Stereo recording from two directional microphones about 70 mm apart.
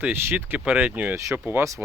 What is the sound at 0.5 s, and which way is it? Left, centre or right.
Speech, centre.